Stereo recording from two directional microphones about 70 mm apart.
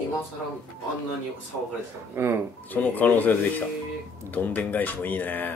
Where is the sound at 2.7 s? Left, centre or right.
Left.